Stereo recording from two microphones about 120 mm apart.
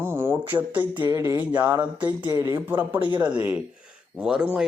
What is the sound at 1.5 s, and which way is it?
Speech, 15° right (ahead or behind).